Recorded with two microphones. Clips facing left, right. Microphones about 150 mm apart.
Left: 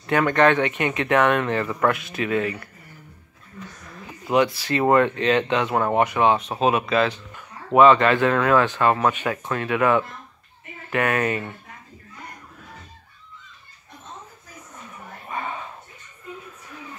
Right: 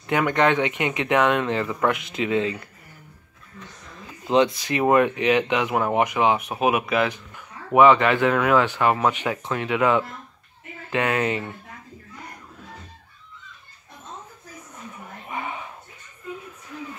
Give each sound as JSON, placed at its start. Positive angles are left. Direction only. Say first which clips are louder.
{"t": 0.0, "sound": "speech", "louder": "left 2 dB", "side_deg": -15}
{"t": 4.3, "sound": "speech", "louder": "right 1 dB", "side_deg": -20}
{"t": 15.2, "sound": "a sound", "louder": "left 1 dB", "side_deg": -15}